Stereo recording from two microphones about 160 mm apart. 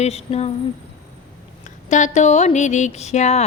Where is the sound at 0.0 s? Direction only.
40° left (ahead or behind).